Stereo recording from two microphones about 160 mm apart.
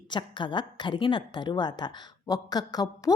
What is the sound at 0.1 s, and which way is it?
Speech, 30° left (ahead or behind).